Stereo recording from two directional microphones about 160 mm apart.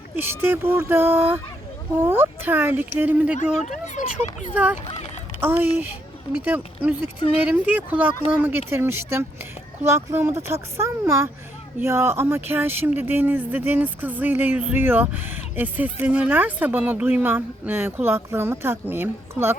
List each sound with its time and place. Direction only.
0.2 s speech: 15° right (ahead or behind)
3.3 s speech: 50° left (ahead or behind)
4.5 s speech: 10° right (ahead or behind)
7.4 s speech: 10° right (ahead or behind)